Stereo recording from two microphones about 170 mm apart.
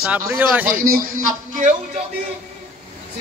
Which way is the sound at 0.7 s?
55° right (ahead or behind).